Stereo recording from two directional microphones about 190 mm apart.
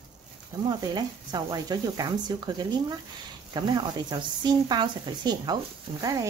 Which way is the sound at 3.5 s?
20° right (ahead or behind).